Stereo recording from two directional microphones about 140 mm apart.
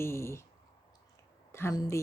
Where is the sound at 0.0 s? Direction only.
20° left (ahead or behind).